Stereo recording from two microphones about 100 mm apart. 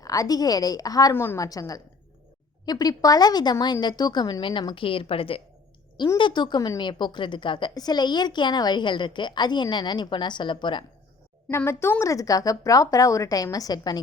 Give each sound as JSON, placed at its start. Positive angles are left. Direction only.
{"t": 0.0, "sound": "speech", "side_deg": 35}
{"t": 1.1, "sound": "a woman's voice", "side_deg": 25}
{"t": 1.4, "sound": "a woman's voice", "side_deg": 35}
{"t": 6.1, "sound": "a woman's voice", "side_deg": 50}
{"t": 7.7, "sound": "a woman's voice", "side_deg": 40}
{"t": 11.5, "sound": "speech", "side_deg": 25}